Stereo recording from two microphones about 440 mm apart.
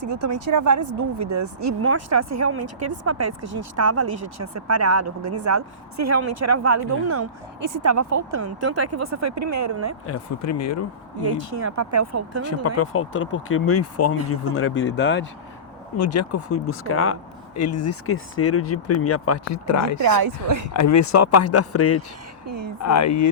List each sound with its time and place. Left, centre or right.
0.4 s speech: right
3.4 s speech: right
3.8 s speech: right
10.1 s speech: left
11.6 s speech: right
12.6 s speech: left
20.0 s a woman's voice: right
20.7 s speech: left
22.4 s a woman's voice: right
22.8 s speech: left